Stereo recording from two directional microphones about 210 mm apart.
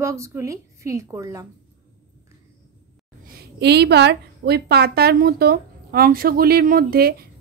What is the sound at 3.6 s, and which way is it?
A woman's voice, 50° right (ahead or behind).